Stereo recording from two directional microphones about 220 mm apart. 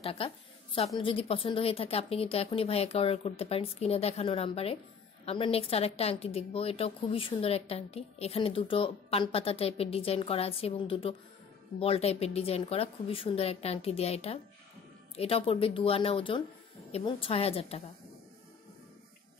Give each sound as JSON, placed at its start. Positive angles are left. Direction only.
{"t": 0.0, "sound": "a woman's voice", "side_deg": 25}